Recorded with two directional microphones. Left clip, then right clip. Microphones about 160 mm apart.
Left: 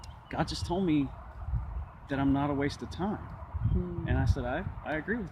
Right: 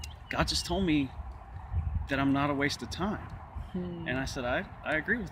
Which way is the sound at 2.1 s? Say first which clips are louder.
Right 1 dB; 20° left (ahead or behind).